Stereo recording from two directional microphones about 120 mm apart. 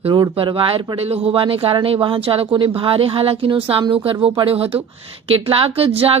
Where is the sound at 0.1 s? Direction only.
40° right (ahead or behind).